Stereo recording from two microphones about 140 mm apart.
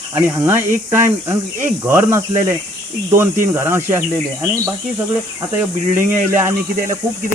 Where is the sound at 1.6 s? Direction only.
15° right (ahead or behind).